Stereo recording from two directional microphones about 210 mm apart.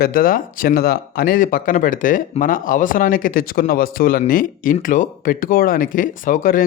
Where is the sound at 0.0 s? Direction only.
45° left (ahead or behind).